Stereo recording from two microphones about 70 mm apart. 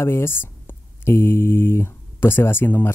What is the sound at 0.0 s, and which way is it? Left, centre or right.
Speech, left.